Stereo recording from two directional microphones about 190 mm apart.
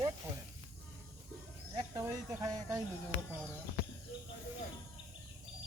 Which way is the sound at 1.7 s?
20° right (ahead or behind).